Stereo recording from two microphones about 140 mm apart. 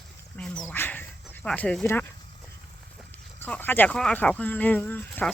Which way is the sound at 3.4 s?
15° left (ahead or behind).